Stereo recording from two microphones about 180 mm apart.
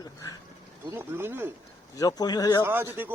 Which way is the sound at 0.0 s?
20° left (ahead or behind).